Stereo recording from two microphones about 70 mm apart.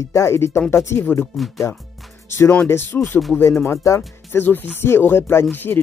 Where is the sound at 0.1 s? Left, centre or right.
Left.